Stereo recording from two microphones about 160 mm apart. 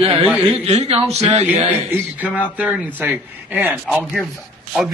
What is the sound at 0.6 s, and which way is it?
Speech, 45° right (ahead or behind).